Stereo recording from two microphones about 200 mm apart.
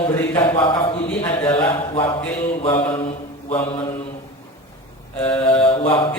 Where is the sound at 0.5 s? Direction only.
25° left (ahead or behind).